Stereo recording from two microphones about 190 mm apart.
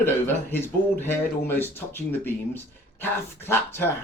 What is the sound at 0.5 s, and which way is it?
Speech, 10° left (ahead or behind).